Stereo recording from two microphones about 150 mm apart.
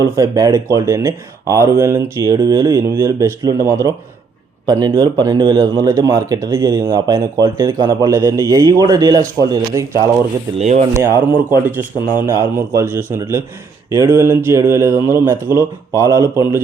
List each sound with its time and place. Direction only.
0.0 s speech: 25° right (ahead or behind)
10.6 s speech: 45° right (ahead or behind)
10.9 s a man's voice: 15° right (ahead or behind)